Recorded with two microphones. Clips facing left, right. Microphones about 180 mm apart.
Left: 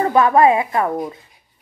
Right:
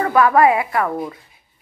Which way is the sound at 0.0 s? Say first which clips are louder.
Left 1 dB; 25° left (ahead or behind).